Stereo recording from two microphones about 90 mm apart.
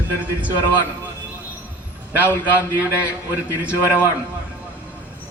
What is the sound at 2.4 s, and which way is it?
Speech, 20° right (ahead or behind).